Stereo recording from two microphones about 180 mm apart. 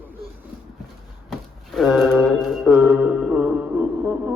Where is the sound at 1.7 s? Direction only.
Centre (ahead or behind).